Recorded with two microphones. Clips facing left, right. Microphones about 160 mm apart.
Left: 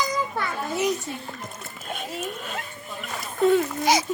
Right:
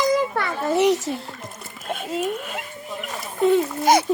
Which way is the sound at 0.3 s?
70° right (ahead or behind).